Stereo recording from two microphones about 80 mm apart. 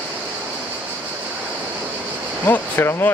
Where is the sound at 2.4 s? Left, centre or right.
Left.